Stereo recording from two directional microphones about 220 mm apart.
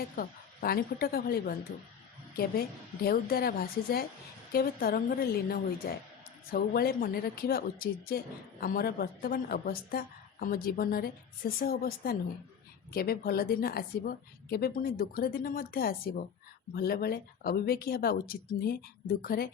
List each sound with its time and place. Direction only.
0.2 s a woman's voice: 45° left (ahead or behind)